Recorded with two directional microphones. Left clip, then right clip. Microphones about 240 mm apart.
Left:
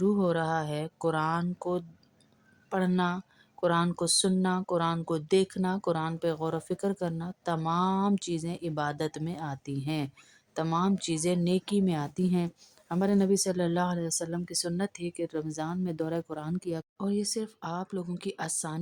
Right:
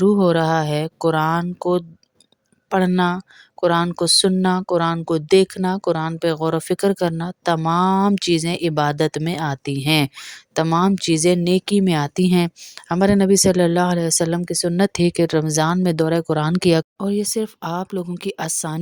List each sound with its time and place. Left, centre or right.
0.0 s speech: right